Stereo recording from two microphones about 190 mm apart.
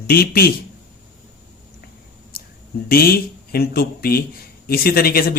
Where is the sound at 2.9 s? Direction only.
50° left (ahead or behind).